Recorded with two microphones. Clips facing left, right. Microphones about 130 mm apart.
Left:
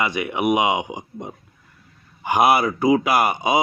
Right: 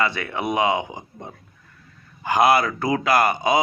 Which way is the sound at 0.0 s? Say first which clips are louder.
Left 2 dB; 15° left (ahead or behind).